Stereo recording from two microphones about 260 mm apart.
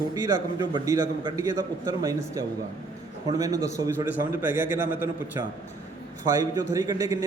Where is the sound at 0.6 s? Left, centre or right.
Centre.